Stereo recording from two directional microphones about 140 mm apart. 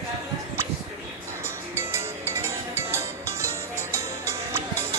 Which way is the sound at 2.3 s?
15° right (ahead or behind).